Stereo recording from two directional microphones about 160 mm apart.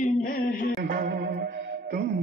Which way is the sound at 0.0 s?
60° left (ahead or behind).